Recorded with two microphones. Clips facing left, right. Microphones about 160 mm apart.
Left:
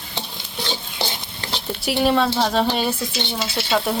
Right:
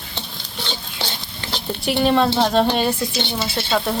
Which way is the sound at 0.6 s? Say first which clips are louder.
Left 2 dB; 10° left (ahead or behind).